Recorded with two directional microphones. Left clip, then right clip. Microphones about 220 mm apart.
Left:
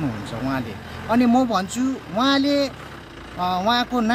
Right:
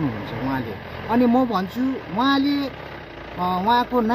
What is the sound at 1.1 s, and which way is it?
Speech, 30° left (ahead or behind).